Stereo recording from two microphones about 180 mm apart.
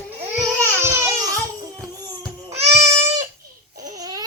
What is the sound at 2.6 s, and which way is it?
Goat, 35° right (ahead or behind).